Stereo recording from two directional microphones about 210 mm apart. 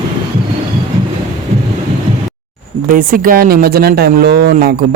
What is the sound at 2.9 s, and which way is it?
Speech, 40° right (ahead or behind).